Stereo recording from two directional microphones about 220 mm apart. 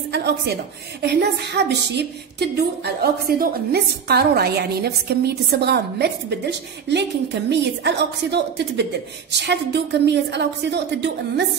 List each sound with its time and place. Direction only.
0.1 s a woman's voice: 50° right (ahead or behind)